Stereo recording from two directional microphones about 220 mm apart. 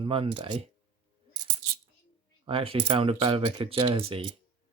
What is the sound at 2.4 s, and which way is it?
Speech, 25° right (ahead or behind).